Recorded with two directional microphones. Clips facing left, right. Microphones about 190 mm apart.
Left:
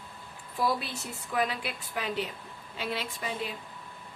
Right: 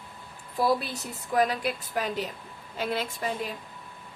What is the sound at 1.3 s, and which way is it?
A woman's voice, 40° right (ahead or behind).